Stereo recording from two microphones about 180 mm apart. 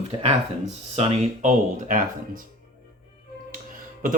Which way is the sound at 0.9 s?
35° right (ahead or behind).